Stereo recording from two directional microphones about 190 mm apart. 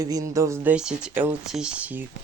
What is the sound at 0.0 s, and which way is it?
Speech, 20° right (ahead or behind).